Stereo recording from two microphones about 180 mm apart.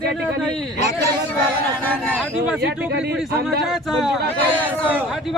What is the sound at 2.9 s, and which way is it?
Speech, 60° right (ahead or behind).